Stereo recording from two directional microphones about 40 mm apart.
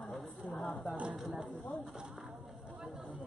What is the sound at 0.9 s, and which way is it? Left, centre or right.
Speech, right.